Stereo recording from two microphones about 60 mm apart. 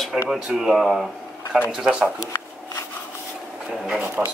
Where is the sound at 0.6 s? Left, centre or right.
Centre.